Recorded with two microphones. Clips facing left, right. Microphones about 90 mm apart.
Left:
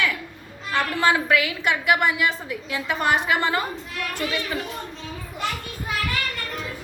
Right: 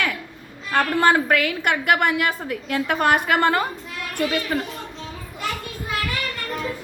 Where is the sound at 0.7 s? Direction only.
50° right (ahead or behind).